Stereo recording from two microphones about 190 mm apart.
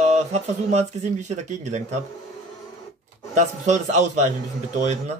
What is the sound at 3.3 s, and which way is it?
Speech, 40° right (ahead or behind).